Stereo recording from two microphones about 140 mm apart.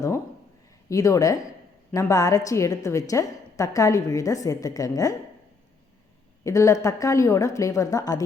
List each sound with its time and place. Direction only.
0.9 s a woman's voice: 25° left (ahead or behind)
6.4 s a woman's voice: 20° left (ahead or behind)